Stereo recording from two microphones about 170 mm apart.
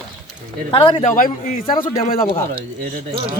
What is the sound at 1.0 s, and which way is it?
Speech, 50° left (ahead or behind).